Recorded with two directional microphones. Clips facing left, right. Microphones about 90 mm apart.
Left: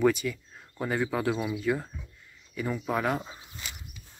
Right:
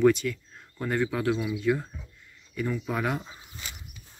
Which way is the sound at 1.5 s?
5° left (ahead or behind).